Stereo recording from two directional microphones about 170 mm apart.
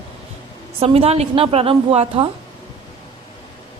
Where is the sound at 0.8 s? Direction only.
35° right (ahead or behind).